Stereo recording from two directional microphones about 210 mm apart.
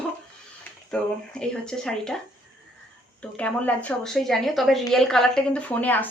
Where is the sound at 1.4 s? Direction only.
5° left (ahead or behind).